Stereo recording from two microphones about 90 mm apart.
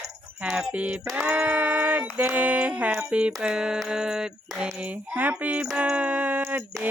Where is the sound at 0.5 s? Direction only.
15° right (ahead or behind).